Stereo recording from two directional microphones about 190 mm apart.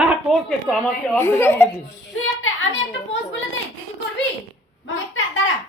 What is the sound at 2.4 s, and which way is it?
A woman's voice, 90° left.